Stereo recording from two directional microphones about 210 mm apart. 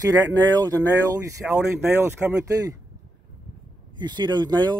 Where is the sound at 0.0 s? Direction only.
15° right (ahead or behind).